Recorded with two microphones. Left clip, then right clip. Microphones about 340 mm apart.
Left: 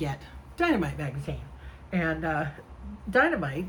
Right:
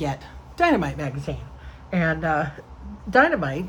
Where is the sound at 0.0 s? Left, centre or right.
Centre.